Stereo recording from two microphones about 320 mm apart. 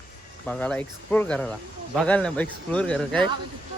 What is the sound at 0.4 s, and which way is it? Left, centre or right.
A man's voice, centre.